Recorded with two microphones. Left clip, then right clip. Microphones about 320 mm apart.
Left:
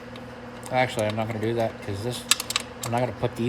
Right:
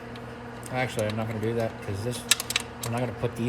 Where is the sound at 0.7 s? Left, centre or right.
Left.